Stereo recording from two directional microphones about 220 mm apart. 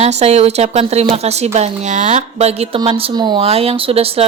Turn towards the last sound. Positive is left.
turn(degrees=-25)  # may be behind; listen again after turning